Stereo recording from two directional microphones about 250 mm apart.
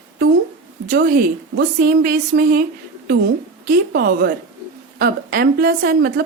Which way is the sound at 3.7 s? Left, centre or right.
Right.